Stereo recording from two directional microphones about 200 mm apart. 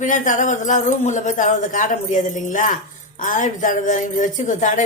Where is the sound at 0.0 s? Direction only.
40° left (ahead or behind).